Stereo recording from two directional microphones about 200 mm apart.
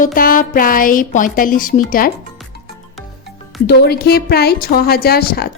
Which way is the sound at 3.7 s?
55° left (ahead or behind).